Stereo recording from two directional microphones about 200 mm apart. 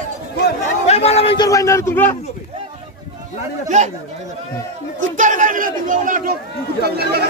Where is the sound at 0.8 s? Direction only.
30° left (ahead or behind).